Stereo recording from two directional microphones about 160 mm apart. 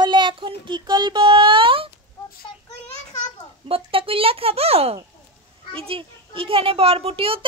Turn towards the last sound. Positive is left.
turn(degrees=-35)  # may be behind; listen again after turning